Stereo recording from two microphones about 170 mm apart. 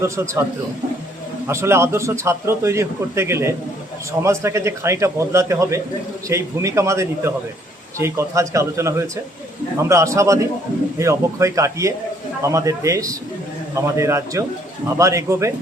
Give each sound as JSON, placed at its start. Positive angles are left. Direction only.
{"t": 0.0, "sound": "a man's voice", "side_deg": -15}
{"t": 1.5, "sound": "a man's voice", "side_deg": -15}